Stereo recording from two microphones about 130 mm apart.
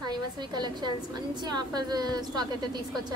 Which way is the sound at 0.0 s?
30° right (ahead or behind).